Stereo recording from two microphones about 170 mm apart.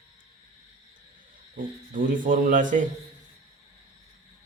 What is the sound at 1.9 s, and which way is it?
Speech, 50° right (ahead or behind).